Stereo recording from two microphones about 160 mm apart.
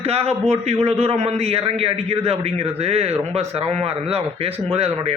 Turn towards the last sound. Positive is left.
turn(degrees=-40)  # may be behind; listen again after turning